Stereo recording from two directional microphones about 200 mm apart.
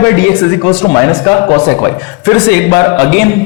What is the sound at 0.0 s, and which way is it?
Speech, 15° left (ahead or behind).